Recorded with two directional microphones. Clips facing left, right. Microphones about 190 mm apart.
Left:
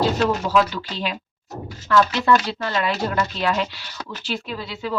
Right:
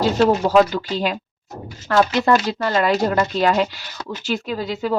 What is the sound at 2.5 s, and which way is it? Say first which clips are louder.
A woman's voice: right 5 dB; 45° right (ahead or behind).